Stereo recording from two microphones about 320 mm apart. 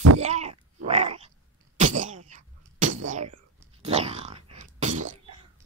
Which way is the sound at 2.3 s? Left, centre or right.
Right.